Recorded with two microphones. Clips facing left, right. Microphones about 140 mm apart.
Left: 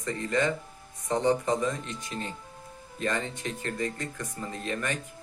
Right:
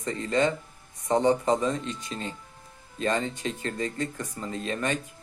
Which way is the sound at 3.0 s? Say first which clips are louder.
Right 3 dB; 25° right (ahead or behind).